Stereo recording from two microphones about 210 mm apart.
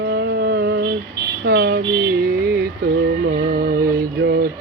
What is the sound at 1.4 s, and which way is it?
Vehicle, 45° right (ahead or behind).